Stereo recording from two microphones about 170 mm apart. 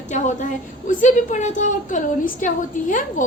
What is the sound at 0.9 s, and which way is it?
A woman's voice, 50° left (ahead or behind).